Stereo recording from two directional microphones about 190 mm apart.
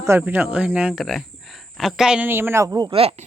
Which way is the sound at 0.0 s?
10° right (ahead or behind).